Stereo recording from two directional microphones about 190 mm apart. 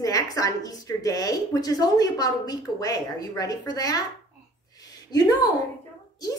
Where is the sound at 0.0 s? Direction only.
20° left (ahead or behind).